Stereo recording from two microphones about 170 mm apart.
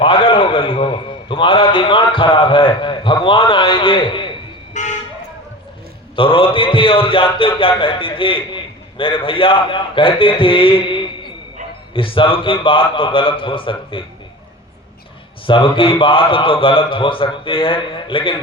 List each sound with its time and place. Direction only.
0.0 s a man's voice: 30° left (ahead or behind)
4.7 s toot: 45° left (ahead or behind)
6.1 s a man's voice: 30° left (ahead or behind)
15.4 s a man's voice: 30° left (ahead or behind)